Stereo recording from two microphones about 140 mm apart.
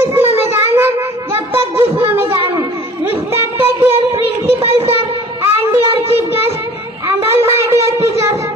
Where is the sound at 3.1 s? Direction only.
15° right (ahead or behind).